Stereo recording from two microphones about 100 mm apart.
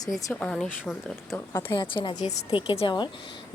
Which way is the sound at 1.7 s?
55° left (ahead or behind).